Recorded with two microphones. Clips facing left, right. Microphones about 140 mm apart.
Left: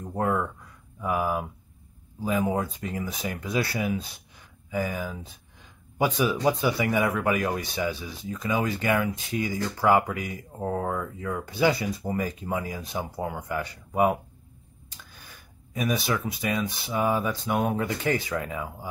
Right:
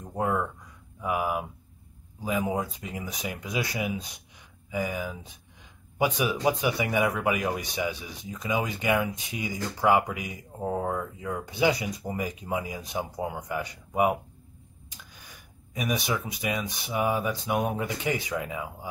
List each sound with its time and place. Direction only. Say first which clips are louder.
1.0 s speech: left 1 dB; 15° right (ahead or behind)